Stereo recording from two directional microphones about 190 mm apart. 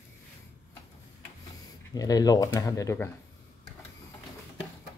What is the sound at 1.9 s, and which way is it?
Speech, 20° left (ahead or behind).